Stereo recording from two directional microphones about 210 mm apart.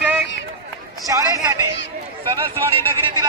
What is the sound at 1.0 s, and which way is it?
Speech, 15° right (ahead or behind).